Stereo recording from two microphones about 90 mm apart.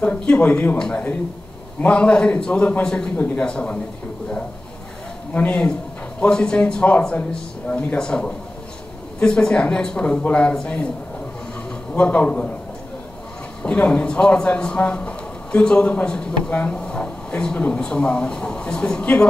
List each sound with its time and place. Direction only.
0.3 s a man's voice: 15° left (ahead or behind)
5.3 s a man's voice: 15° left (ahead or behind)
11.9 s a man's voice: 15° left (ahead or behind)
13.6 s a man's voice: 15° left (ahead or behind)